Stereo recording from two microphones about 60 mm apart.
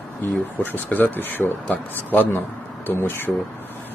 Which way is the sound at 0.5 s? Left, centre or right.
Left.